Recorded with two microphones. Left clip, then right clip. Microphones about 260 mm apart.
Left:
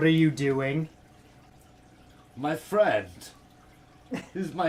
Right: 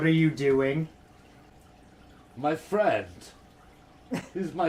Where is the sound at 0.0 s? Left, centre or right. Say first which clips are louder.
Left 1 dB; left.